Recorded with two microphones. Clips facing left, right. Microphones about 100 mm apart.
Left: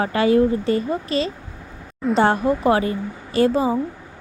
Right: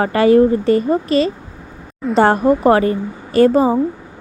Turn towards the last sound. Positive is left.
turn(degrees=-50)  # may be behind; listen again after turning